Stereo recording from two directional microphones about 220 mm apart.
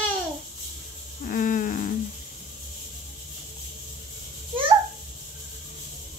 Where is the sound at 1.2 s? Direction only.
35° left (ahead or behind).